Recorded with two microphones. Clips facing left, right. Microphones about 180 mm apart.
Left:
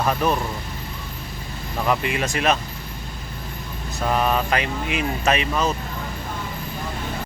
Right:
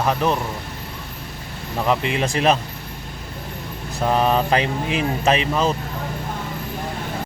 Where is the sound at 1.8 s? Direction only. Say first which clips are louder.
Right 2 dB; 25° right (ahead or behind).